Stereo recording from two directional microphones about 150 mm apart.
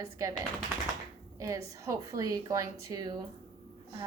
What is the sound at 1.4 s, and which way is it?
A woman's voice, 20° right (ahead or behind).